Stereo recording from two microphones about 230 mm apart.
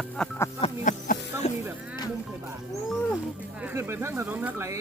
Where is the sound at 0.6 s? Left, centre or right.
Left.